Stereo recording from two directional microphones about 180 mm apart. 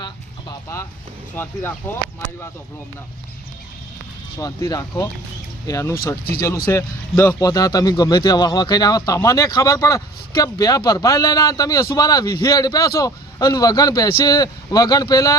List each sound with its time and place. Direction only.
0.0 s a sound: 20° left (ahead or behind)
1.4 s speech: 10° left (ahead or behind)
4.4 s a man's voice: 20° left (ahead or behind)